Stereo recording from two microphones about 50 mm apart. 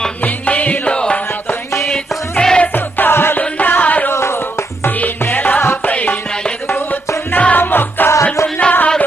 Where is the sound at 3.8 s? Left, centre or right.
Left.